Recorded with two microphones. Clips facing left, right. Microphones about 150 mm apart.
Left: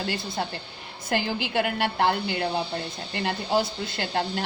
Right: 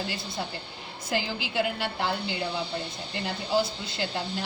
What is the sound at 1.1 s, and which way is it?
Speech, 60° left (ahead or behind).